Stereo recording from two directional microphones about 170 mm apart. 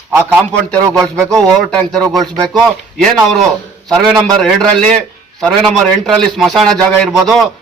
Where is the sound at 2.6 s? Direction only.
Centre (ahead or behind).